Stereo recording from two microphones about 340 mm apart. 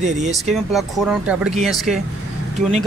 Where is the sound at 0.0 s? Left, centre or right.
Right.